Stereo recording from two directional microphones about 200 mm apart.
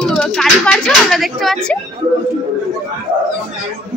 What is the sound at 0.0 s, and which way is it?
Speech, 5° left (ahead or behind).